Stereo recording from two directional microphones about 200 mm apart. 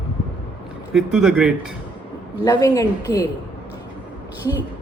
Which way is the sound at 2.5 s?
15° left (ahead or behind).